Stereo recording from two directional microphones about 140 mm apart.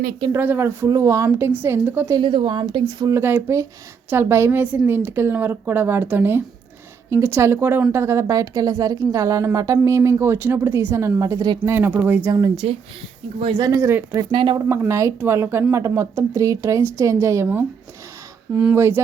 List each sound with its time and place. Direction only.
0.3 s speech: 15° right (ahead or behind)
2.1 s speech: 35° right (ahead or behind)
3.0 s a woman's voice: 20° right (ahead or behind)
12.6 s speech: 45° right (ahead or behind)
13.4 s speech: 35° right (ahead or behind)
13.7 s a woman's voice: 20° right (ahead or behind)
14.3 s speech: 35° right (ahead or behind)
14.7 s a woman's voice: 20° right (ahead or behind)